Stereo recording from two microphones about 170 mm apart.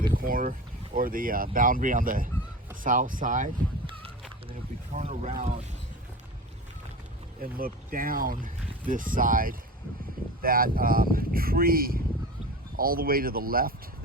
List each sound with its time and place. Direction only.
0.1 s boat: 55° right (ahead or behind)
0.9 s speech: 55° right (ahead or behind)
4.9 s speech: 40° right (ahead or behind)
7.4 s speech: 60° right (ahead or behind)